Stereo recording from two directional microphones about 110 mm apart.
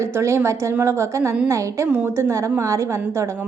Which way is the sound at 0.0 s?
25° right (ahead or behind).